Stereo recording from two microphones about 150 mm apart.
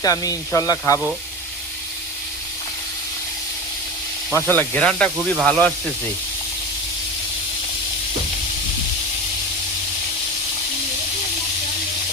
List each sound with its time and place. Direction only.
0.0 s speech: 25° left (ahead or behind)
4.4 s speech: 10° left (ahead or behind)